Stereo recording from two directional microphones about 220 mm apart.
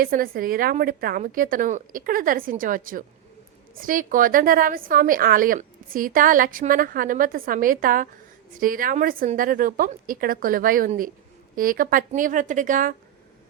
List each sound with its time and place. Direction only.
0.0 s a woman's voice: 40° right (ahead or behind)